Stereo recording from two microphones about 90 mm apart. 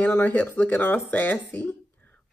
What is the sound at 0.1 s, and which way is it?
Speech, 20° left (ahead or behind).